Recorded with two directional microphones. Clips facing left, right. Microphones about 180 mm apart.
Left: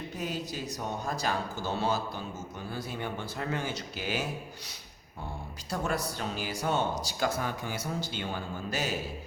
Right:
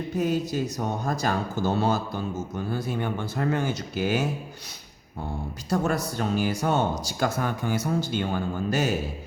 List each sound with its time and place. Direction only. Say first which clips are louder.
0.2 s speech: right 11 dB; 50° right (ahead or behind)
5.7 s speech: right 7 dB; 45° right (ahead or behind)